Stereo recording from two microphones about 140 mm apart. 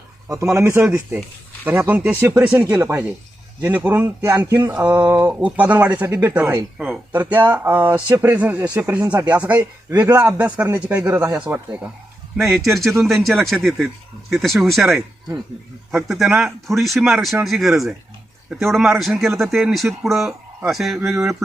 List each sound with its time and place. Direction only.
0.5 s speech: 15° right (ahead or behind)
4.7 s speech: 10° right (ahead or behind)
6.7 s speech: centre (ahead or behind)
12.4 s speech: centre (ahead or behind)
16.0 s speech: centre (ahead or behind)